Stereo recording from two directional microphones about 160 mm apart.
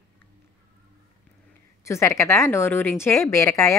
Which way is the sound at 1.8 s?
15° left (ahead or behind).